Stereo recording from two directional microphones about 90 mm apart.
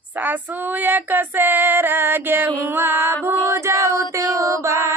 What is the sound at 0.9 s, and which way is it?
Female singing, 20° right (ahead or behind).